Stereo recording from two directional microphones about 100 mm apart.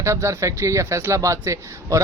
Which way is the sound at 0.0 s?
30° right (ahead or behind).